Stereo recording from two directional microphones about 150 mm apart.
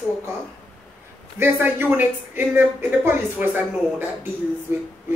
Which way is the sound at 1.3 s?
15° right (ahead or behind).